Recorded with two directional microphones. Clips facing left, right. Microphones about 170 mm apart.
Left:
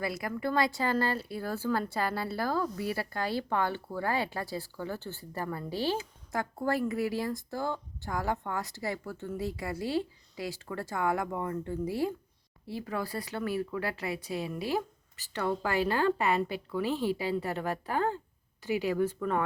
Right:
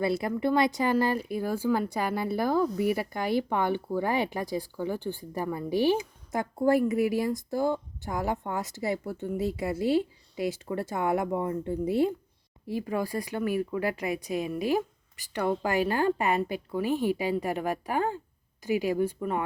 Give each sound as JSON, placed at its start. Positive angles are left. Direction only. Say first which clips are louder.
{"t": 0.0, "sound": "speech", "louder": "right 6 dB", "side_deg": -25}